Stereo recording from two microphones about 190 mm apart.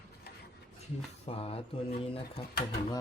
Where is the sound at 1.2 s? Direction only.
30° left (ahead or behind).